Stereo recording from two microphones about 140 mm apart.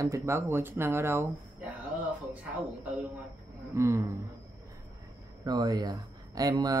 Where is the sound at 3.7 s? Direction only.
20° right (ahead or behind).